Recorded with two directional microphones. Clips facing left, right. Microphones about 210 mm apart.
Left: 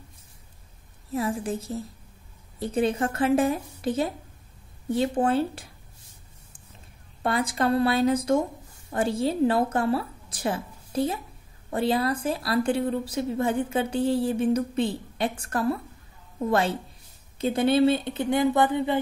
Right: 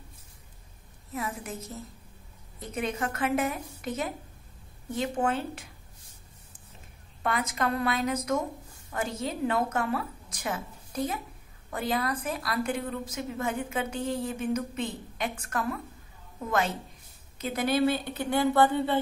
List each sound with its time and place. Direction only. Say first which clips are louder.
1.1 s a woman's voice: left 8 dB; 30° left (ahead or behind)
7.2 s a woman's voice: left 5 dB; 30° left (ahead or behind); by 18.9 s 15° left (ahead or behind)